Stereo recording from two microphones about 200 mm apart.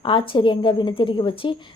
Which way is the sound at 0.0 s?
25° left (ahead or behind).